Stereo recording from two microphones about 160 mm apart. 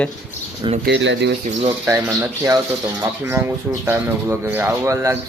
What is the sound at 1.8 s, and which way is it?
Speech, 15° right (ahead or behind).